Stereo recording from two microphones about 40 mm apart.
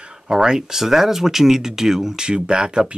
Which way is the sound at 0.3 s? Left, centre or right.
Centre.